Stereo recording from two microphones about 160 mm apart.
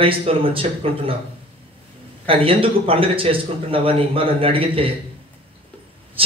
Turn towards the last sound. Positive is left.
turn(degrees=-35)  # may be behind; listen again after turning